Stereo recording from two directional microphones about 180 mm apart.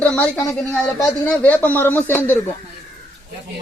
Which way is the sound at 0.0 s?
5° left (ahead or behind).